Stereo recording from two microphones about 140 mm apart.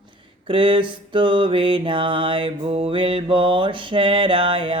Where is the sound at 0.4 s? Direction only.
35° right (ahead or behind).